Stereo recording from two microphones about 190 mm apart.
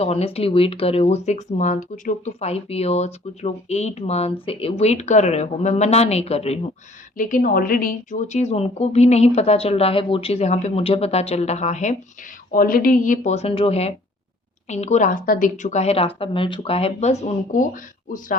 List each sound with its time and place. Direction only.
0.0 s a woman's voice: 30° left (ahead or behind)
7.2 s a woman's voice: 45° left (ahead or behind)